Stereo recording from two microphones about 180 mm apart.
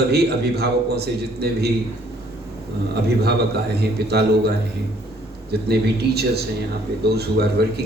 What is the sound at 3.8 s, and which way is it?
Speech, 65° right (ahead or behind).